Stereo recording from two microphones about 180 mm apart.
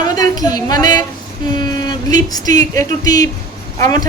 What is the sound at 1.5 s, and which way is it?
A woman's voice, 25° left (ahead or behind).